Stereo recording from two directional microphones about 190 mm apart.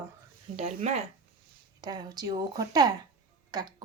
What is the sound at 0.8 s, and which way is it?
Speech, 35° right (ahead or behind).